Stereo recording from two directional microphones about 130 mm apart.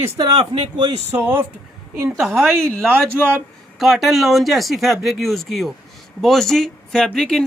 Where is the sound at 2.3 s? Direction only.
20° right (ahead or behind).